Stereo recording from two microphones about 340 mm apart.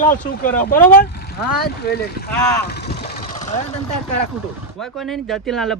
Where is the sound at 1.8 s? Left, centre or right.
Left.